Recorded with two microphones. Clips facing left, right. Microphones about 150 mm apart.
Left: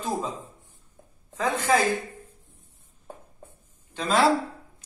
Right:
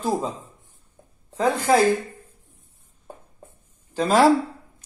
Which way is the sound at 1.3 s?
30° right (ahead or behind).